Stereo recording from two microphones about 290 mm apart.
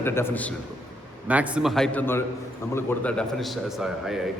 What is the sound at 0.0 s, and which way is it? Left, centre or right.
Speech, centre.